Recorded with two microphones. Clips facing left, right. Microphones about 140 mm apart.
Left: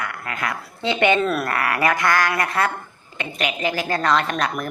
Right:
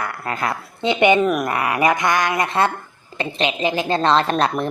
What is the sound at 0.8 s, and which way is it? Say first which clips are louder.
A woman's voice: right 3 dB; 20° right (ahead or behind).